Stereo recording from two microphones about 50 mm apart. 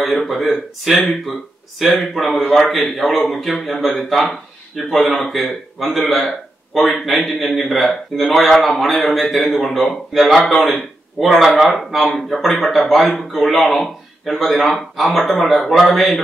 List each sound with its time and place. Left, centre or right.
0.0 s a man's voice: centre